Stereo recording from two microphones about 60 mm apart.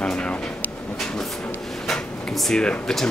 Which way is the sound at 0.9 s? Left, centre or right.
Centre.